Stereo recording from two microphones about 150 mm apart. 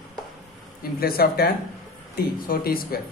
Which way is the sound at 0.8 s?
90° left.